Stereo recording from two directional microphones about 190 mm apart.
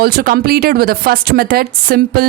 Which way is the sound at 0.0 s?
50° right (ahead or behind).